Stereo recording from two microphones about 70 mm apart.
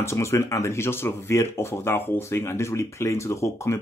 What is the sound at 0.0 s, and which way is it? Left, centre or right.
Speech, left.